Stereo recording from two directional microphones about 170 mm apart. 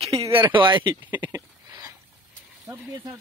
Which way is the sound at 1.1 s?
15° right (ahead or behind).